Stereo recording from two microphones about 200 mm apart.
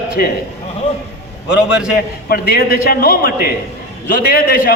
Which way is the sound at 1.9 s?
50° left (ahead or behind).